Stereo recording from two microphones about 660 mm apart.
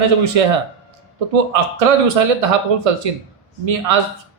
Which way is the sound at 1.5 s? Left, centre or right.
Right.